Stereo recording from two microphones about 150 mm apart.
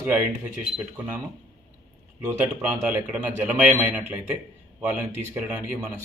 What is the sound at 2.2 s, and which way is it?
A man's voice, 15° right (ahead or behind).